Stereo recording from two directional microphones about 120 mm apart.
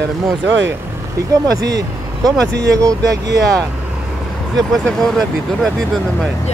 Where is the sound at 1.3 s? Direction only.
30° right (ahead or behind).